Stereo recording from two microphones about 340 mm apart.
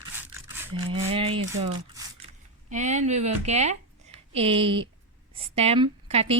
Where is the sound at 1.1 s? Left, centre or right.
Centre.